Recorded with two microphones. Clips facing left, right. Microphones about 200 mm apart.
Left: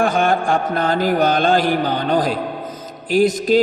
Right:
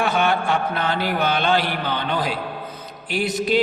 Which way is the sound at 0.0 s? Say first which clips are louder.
Left 4 dB; 45° left (ahead or behind).